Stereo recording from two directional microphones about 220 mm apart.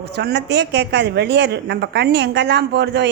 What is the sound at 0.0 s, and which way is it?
Speech, 50° right (ahead or behind).